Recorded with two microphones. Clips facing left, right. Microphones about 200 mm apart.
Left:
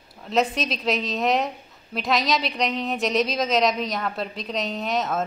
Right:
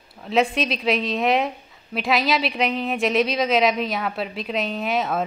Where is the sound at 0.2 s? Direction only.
Centre (ahead or behind).